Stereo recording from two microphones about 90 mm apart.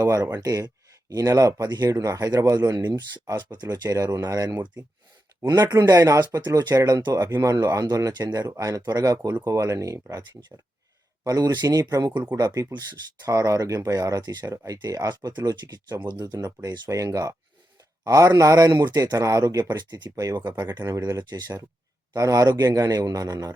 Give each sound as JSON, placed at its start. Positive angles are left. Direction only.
{"t": 0.0, "sound": "speech", "side_deg": -40}
{"t": 12.1, "sound": "speech", "side_deg": -20}
{"t": 12.4, "sound": "speech", "side_deg": -45}
{"t": 16.0, "sound": "speech", "side_deg": -55}
{"t": 19.1, "sound": "speech", "side_deg": -40}